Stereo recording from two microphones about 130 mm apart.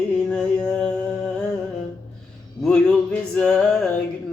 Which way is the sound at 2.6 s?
10° left (ahead or behind).